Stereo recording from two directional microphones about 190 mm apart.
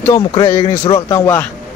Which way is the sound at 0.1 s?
30° left (ahead or behind).